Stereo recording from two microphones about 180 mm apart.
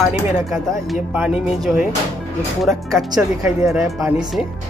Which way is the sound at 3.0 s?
20° right (ahead or behind).